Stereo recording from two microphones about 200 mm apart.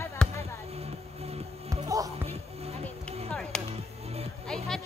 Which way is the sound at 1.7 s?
15° right (ahead or behind).